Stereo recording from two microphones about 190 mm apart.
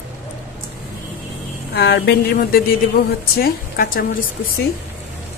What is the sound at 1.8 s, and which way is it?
A woman's voice, 60° left (ahead or behind).